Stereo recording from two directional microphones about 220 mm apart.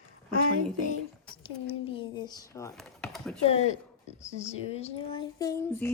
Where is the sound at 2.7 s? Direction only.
Centre (ahead or behind).